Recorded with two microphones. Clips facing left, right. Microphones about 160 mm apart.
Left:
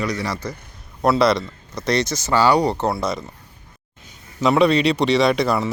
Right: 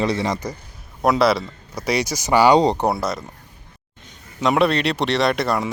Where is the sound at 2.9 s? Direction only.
Centre (ahead or behind).